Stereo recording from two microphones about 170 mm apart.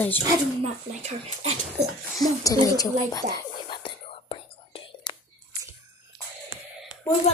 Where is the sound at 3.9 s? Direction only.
30° left (ahead or behind).